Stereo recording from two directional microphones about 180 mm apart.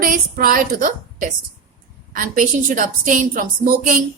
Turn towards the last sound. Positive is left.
turn(degrees=-45)  # may be behind; listen again after turning